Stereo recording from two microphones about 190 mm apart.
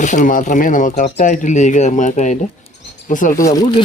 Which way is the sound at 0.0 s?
40° left (ahead or behind).